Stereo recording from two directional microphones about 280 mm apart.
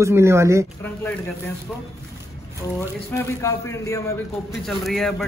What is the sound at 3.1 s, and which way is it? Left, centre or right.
A man's voice, centre.